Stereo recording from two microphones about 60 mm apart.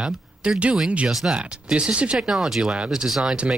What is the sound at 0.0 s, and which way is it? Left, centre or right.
Speech, centre.